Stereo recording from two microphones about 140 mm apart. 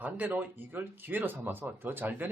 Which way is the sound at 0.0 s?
10° right (ahead or behind).